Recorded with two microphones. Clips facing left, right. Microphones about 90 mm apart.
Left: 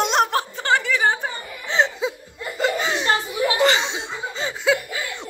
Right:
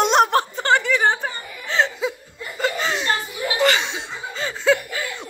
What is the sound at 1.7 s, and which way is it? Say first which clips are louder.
Laughter: even; 20° left (ahead or behind).